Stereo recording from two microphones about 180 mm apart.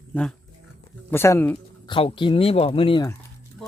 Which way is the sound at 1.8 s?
25° left (ahead or behind).